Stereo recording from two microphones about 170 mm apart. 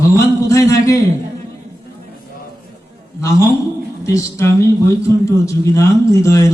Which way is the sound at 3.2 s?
20° left (ahead or behind).